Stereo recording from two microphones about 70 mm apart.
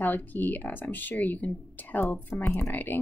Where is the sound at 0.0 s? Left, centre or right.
Left.